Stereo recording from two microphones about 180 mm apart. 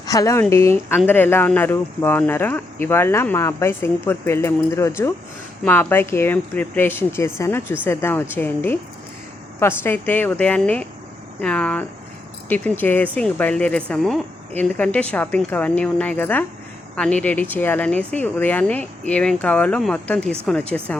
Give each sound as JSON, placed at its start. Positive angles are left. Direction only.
{"t": 0.0, "sound": "speech", "side_deg": 20}